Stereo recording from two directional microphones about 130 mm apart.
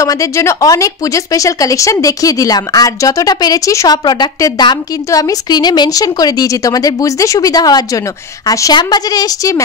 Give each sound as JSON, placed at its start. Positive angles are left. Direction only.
{"t": 0.0, "sound": "speech", "side_deg": 25}